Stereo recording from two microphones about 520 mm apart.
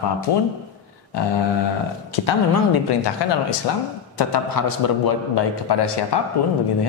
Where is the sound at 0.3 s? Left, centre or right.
Left.